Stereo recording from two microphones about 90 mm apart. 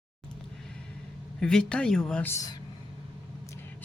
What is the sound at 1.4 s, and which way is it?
Speech, 10° left (ahead or behind).